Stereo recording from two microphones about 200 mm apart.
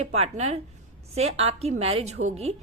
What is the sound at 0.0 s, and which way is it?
A woman's voice, 30° right (ahead or behind).